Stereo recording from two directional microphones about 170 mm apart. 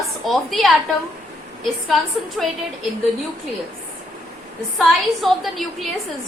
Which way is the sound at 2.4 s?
Centre (ahead or behind).